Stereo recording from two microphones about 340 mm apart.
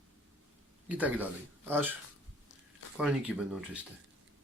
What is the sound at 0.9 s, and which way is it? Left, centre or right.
A man's voice, centre.